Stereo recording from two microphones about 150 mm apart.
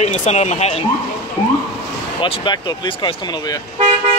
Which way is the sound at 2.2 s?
35° left (ahead or behind).